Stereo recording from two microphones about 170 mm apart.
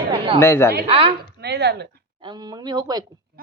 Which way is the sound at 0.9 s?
35° right (ahead or behind).